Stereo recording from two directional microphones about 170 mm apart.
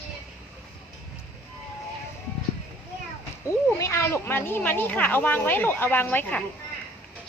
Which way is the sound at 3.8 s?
15° left (ahead or behind).